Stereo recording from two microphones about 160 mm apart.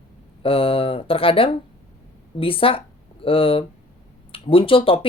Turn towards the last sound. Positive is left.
turn(degrees=35)  # may be behind; listen again after turning